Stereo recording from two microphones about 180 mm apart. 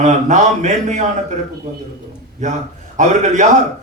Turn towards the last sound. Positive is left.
turn(degrees=-40)  # may be behind; listen again after turning